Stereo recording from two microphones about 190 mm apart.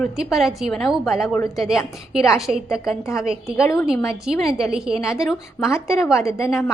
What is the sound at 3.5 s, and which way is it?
Speech, 15° left (ahead or behind).